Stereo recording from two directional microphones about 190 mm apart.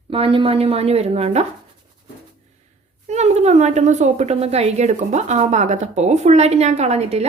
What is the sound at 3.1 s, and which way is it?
A woman's voice, 35° right (ahead or behind).